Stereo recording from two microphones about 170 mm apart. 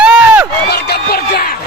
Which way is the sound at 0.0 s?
5° right (ahead or behind).